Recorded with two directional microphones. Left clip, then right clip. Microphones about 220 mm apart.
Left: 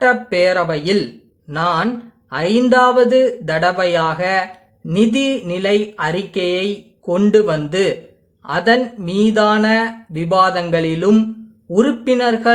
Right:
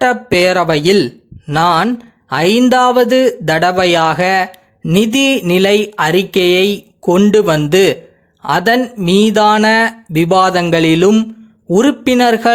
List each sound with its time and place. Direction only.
0.0 s speech: 45° right (ahead or behind)